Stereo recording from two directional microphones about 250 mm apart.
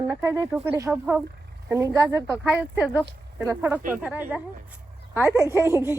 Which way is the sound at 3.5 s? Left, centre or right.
Centre.